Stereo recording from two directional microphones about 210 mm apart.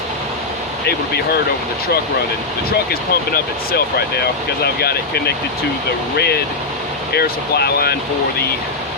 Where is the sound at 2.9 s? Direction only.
45° left (ahead or behind).